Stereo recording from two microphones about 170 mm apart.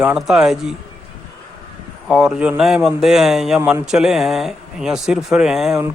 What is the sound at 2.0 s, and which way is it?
A man's voice, 5° right (ahead or behind).